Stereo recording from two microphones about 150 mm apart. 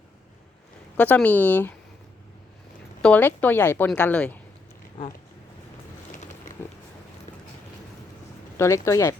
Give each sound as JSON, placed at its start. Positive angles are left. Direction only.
{"t": 0.9, "sound": "a woman's voice", "side_deg": 10}
{"t": 3.0, "sound": "a woman's voice", "side_deg": 10}
{"t": 8.5, "sound": "speech", "side_deg": 20}